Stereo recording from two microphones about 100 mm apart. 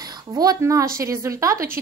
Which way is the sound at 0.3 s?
40° right (ahead or behind).